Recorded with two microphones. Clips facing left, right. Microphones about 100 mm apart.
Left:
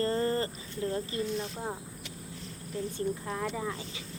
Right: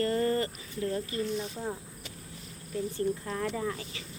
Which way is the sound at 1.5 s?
20° left (ahead or behind).